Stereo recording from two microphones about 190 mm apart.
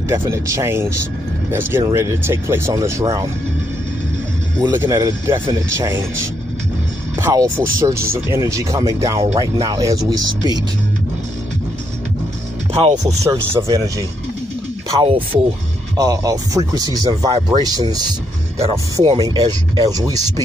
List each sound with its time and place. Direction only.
0.1 s speech: 15° right (ahead or behind)
4.6 s speech: 15° right (ahead or behind)
7.2 s speech: 10° right (ahead or behind)
12.8 s speech: 35° right (ahead or behind)
13.2 s speech: 15° right (ahead or behind)
15.0 s speech: 30° right (ahead or behind)
18.9 s speech: 20° right (ahead or behind)